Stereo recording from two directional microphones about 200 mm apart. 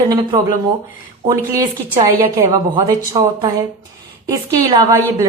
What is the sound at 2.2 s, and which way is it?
A woman's voice, 20° right (ahead or behind).